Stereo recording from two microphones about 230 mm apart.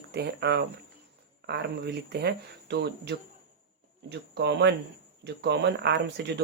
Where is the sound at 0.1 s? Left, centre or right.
Right.